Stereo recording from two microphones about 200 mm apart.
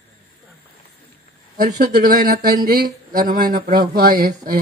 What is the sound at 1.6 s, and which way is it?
Speech, 40° right (ahead or behind).